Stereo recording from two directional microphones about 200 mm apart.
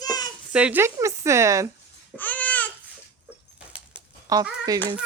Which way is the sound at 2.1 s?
10° left (ahead or behind).